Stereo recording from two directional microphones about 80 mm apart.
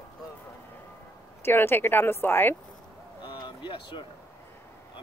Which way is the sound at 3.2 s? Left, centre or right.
Left.